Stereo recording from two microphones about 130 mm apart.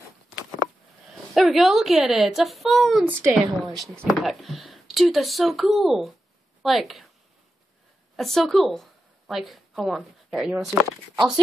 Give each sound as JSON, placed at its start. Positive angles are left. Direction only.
{"t": 1.3, "sound": "a woman's voice", "side_deg": 0}
{"t": 8.2, "sound": "speech", "side_deg": 0}